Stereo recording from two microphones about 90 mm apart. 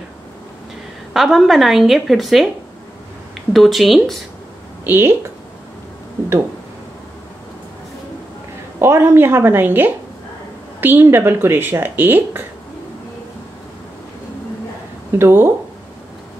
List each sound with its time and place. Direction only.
1.1 s a woman's voice: centre (ahead or behind)
3.5 s a woman's voice: centre (ahead or behind)
4.8 s speech: 25° right (ahead or behind)
8.7 s speech: 30° right (ahead or behind)
15.1 s speech: 25° right (ahead or behind)